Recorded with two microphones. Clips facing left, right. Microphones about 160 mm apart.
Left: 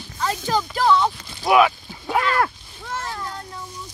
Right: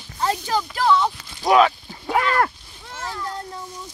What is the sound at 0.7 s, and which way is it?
Speech, centre (ahead or behind).